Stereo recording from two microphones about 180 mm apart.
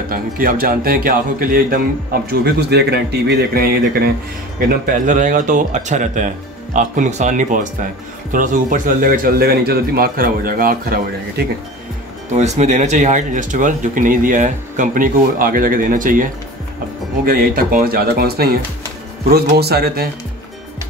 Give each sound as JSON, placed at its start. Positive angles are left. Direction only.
{"t": 0.1, "sound": "speech", "side_deg": -55}
{"t": 2.4, "sound": "speech", "side_deg": -65}
{"t": 12.4, "sound": "speech", "side_deg": -40}